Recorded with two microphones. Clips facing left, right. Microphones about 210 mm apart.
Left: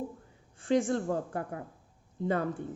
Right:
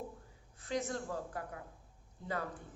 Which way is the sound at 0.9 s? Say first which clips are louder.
Left 9 dB; 55° left (ahead or behind).